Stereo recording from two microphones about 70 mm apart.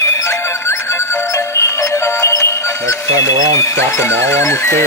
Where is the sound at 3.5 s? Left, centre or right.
Left.